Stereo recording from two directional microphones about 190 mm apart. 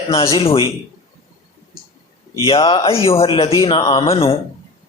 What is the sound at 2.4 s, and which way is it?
Speech, 30° left (ahead or behind).